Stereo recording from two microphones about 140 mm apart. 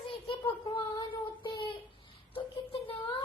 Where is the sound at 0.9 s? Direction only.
30° left (ahead or behind).